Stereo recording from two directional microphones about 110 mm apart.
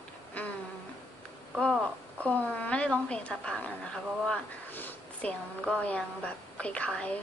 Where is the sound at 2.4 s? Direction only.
10° left (ahead or behind).